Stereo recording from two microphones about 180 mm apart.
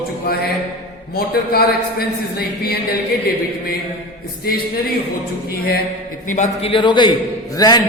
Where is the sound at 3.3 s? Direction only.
60° left (ahead or behind).